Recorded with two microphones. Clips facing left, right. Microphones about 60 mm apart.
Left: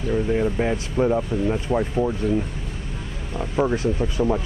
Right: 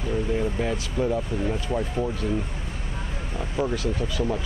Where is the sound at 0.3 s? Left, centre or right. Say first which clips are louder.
Left 4 dB; left.